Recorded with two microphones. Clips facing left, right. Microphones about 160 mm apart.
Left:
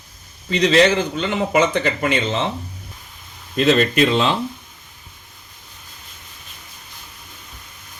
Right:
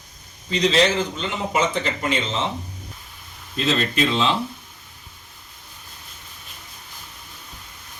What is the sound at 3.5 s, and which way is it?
Speech, 65° left (ahead or behind).